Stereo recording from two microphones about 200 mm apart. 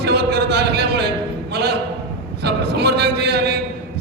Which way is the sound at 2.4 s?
55° right (ahead or behind).